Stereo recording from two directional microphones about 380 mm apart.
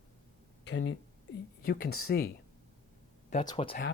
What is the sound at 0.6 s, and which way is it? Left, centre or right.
Speech, left.